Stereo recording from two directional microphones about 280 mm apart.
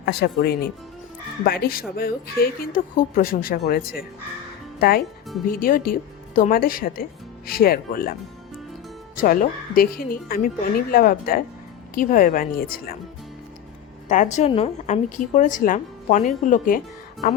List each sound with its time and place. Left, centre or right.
0.0 s speech: left
9.2 s speech: left
14.1 s speech: left